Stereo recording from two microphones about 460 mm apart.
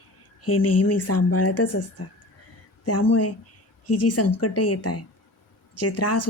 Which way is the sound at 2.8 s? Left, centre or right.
Left.